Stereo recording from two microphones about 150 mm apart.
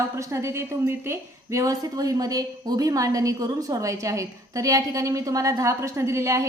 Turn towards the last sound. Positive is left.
turn(degrees=-20)  # may be behind; listen again after turning